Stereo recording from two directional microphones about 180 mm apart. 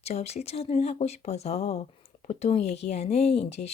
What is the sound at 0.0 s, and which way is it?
A woman's voice, 35° left (ahead or behind).